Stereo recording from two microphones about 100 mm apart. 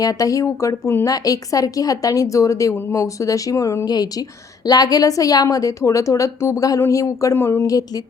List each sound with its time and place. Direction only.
0.0 s a woman's voice: 35° left (ahead or behind)